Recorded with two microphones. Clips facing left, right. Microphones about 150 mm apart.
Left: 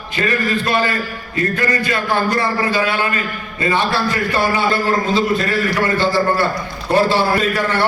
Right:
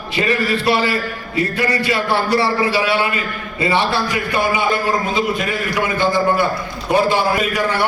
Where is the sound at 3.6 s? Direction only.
25° right (ahead or behind).